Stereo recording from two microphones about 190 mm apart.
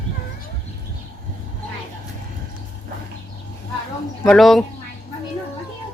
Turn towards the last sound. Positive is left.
turn(degrees=0)  # may be behind; listen again after turning